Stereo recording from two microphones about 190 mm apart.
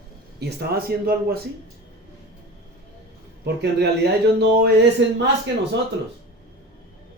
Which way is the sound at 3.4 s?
60° right (ahead or behind).